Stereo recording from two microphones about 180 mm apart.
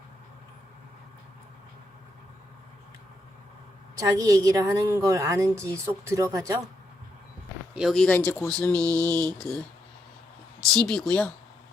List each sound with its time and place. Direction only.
3.9 s a woman's voice: 20° right (ahead or behind)
7.8 s speech: centre (ahead or behind)
9.0 s a woman's voice: 20° right (ahead or behind)
10.8 s speech: 5° left (ahead or behind)